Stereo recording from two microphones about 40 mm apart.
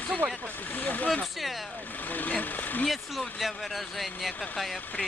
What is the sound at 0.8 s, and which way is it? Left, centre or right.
Speech, left.